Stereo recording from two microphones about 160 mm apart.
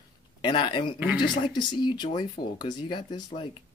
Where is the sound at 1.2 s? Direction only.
30° left (ahead or behind).